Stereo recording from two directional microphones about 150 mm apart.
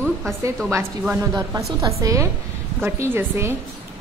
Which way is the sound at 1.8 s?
20° right (ahead or behind).